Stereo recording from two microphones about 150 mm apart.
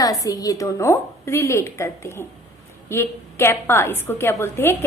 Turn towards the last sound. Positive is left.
turn(degrees=15)  # may be behind; listen again after turning